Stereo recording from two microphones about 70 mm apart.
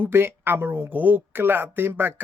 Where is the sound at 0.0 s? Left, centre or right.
Right.